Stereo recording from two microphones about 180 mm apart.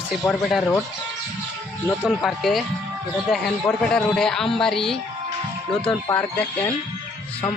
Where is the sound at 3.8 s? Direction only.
5° left (ahead or behind).